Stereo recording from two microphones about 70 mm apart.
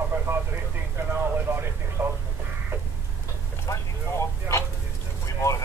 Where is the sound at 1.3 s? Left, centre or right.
Right.